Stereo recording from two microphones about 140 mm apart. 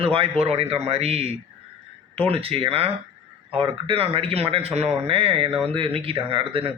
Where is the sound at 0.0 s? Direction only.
40° right (ahead or behind).